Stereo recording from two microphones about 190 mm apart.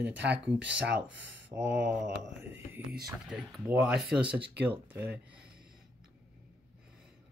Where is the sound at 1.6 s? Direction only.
70° right (ahead or behind).